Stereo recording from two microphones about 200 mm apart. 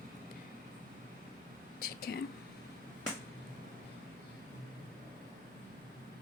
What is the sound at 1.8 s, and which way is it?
Whispering, 50° left (ahead or behind).